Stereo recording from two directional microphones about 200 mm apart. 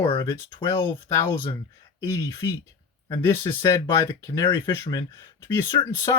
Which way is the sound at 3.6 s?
15° left (ahead or behind).